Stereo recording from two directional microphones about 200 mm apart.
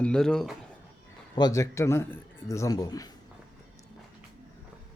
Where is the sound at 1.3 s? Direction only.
20° left (ahead or behind).